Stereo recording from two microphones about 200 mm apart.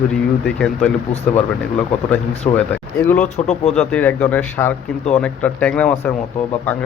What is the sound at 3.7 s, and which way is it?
Speech, 5° left (ahead or behind).